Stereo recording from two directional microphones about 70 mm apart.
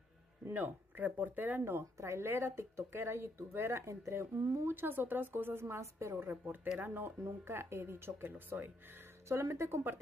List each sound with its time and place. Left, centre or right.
0.5 s speech: right
9.3 s speech: right